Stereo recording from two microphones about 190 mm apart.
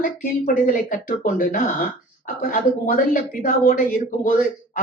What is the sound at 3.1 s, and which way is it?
Speech, 45° left (ahead or behind).